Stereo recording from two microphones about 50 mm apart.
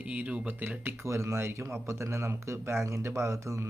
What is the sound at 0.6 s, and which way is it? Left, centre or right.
Speech, right.